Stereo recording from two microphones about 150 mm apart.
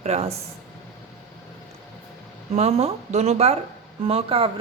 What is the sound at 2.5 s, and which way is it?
A woman's voice, 45° right (ahead or behind).